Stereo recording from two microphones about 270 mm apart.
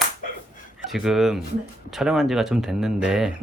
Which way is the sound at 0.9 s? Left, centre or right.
Centre.